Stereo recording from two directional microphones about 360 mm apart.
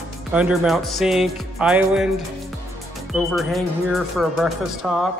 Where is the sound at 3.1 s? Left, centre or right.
Centre.